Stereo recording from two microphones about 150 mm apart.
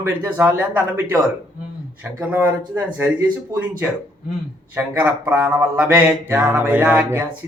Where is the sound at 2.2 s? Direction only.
10° right (ahead or behind).